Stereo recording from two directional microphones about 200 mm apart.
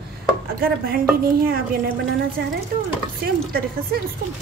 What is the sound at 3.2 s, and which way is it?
Speech, 50° right (ahead or behind).